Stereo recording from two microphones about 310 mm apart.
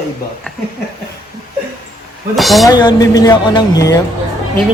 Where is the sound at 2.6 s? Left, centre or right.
Centre.